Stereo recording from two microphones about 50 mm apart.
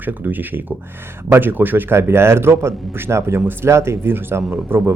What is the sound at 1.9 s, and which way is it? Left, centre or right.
A man's voice, right.